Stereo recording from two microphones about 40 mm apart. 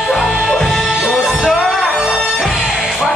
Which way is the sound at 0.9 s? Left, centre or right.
Centre.